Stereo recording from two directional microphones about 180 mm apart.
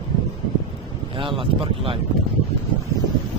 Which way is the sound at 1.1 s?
30° right (ahead or behind).